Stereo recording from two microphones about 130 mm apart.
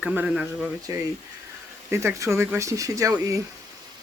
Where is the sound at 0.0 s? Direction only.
5° right (ahead or behind).